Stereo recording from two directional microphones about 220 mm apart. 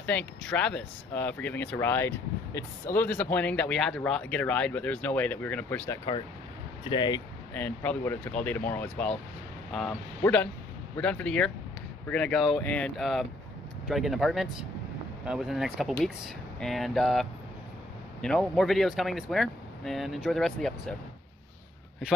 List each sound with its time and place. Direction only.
0.0 s speech: 5° left (ahead or behind)
6.8 s speech: 20° left (ahead or behind)
7.5 s speech: 5° left (ahead or behind)